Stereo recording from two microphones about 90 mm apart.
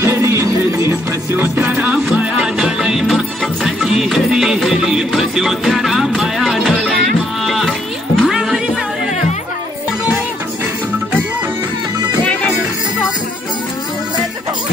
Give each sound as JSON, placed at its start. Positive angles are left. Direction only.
{"t": 0.0, "sound": "music", "side_deg": -30}
{"t": 2.1, "sound": "music", "side_deg": -5}